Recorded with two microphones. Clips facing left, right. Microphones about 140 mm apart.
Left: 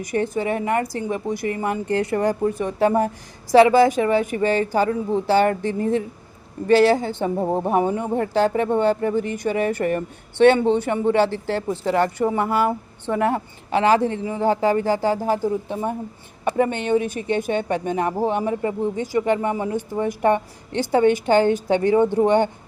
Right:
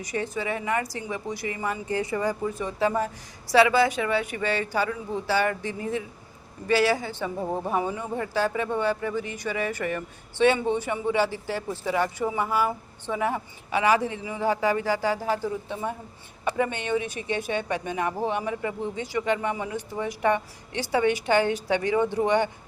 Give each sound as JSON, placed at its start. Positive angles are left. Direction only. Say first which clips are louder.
{"t": 0.0, "sound": "speech", "louder": "left 7 dB", "side_deg": 55}
{"t": 5.1, "sound": "speech", "louder": "left 7 dB", "side_deg": 55}